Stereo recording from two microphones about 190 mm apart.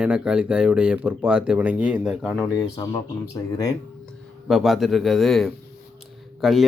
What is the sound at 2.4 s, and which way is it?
Speech, 15° left (ahead or behind).